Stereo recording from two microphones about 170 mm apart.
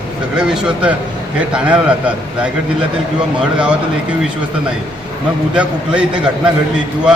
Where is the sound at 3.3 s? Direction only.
5° right (ahead or behind).